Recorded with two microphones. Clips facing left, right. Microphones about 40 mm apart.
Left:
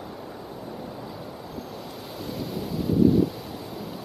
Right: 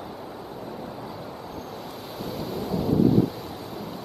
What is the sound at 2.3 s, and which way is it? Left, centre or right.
Waves, centre.